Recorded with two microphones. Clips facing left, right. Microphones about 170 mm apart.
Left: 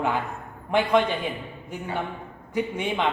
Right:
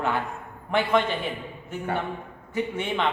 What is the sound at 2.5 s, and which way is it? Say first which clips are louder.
Speech: left 1 dB; 15° left (ahead or behind).